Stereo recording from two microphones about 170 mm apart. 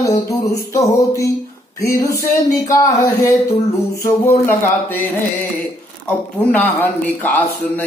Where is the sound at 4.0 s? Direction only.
15° left (ahead or behind).